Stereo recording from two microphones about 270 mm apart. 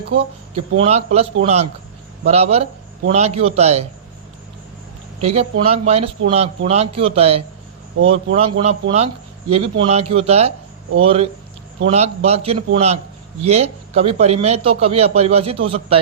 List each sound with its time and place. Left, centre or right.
0.5 s a man's voice: right
5.2 s a man's voice: right